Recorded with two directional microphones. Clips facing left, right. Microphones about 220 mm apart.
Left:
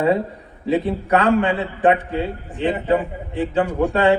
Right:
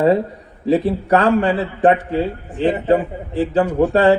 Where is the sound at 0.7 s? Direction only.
35° right (ahead or behind).